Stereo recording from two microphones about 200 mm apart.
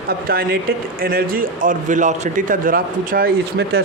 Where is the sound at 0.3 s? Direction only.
45° right (ahead or behind).